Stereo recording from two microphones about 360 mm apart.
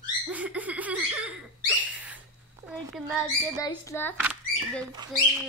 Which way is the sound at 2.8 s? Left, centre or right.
Centre.